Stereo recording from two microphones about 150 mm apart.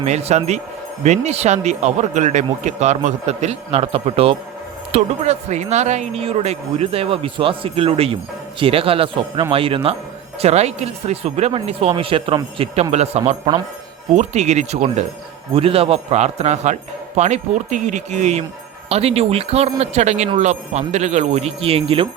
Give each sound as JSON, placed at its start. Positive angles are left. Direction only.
{"t": 0.0, "sound": "speech", "side_deg": -45}